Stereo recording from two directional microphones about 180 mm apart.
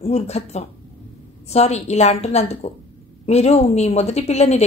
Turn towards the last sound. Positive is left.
turn(degrees=35)  # may be behind; listen again after turning